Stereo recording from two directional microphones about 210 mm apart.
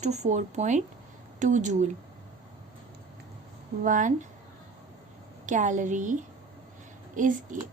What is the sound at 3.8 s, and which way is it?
Speech, 40° right (ahead or behind).